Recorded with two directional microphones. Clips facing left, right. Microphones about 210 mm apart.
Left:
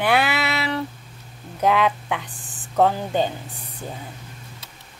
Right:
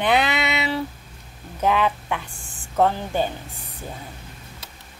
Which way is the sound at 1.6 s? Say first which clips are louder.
Left 1 dB; 10° left (ahead or behind).